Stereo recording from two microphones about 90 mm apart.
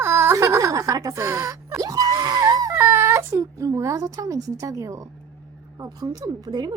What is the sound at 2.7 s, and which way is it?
A woman's voice, 25° right (ahead or behind).